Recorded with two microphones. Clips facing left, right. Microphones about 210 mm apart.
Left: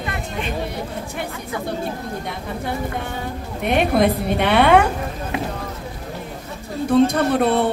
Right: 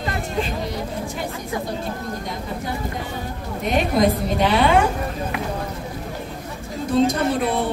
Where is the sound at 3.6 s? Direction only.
60° left (ahead or behind).